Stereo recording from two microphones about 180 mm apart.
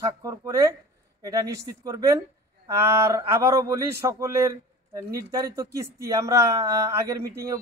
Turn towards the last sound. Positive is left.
turn(degrees=-15)  # may be behind; listen again after turning